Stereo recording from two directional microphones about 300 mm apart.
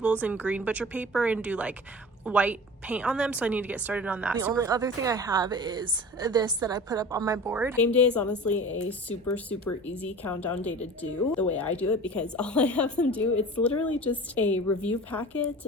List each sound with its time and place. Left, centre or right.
0.0 s a woman's voice: centre
7.8 s a woman's voice: centre
8.5 s a woman's voice: left
9.3 s a woman's voice: centre